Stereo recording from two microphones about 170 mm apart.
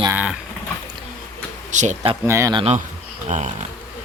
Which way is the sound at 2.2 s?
15° right (ahead or behind).